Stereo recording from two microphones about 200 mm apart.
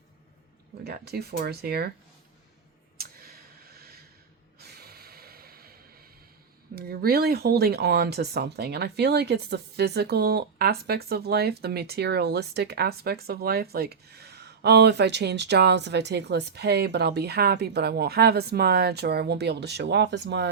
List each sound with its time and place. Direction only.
0.9 s speech: 50° right (ahead or behind)
3.0 s a sound: 50° right (ahead or behind)
4.6 s snort: 50° right (ahead or behind)
6.7 s speech: 50° right (ahead or behind)